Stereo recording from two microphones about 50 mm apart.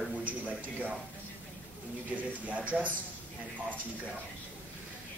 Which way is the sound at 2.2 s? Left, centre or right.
Right.